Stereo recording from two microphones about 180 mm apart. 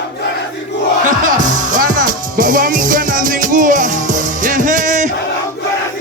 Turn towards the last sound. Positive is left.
turn(degrees=-45)  # may be behind; listen again after turning